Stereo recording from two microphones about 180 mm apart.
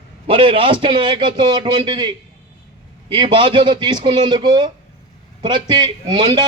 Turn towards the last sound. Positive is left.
turn(degrees=-25)  # may be behind; listen again after turning